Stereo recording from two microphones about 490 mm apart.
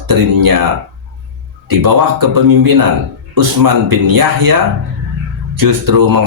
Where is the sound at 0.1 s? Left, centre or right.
Right.